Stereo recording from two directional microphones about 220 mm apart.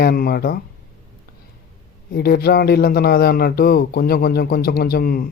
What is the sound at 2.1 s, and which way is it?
Speech, 45° left (ahead or behind).